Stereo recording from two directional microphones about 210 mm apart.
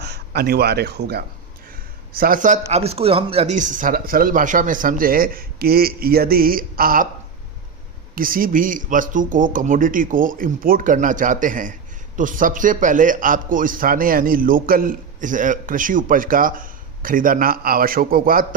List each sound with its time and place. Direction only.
0.0 s a man's voice: 50° right (ahead or behind)
8.1 s a man's voice: 40° right (ahead or behind)